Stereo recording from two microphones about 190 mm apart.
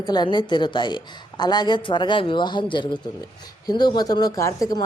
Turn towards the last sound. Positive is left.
turn(degrees=15)  # may be behind; listen again after turning